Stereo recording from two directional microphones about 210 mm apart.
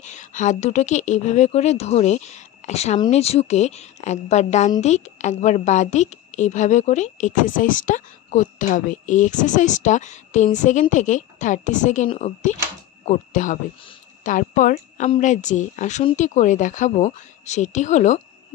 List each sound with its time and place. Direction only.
0.0 s a woman's voice: 35° left (ahead or behind)